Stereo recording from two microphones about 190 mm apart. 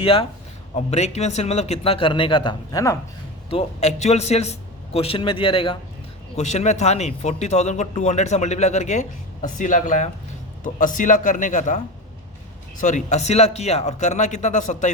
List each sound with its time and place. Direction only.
0.0 s a man's voice: 30° left (ahead or behind)
3.5 s a man's voice: 35° left (ahead or behind)
6.3 s a man's voice: 40° left (ahead or behind)
12.8 s speech: 40° left (ahead or behind)